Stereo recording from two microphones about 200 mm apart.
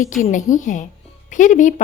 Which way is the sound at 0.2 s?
40° left (ahead or behind).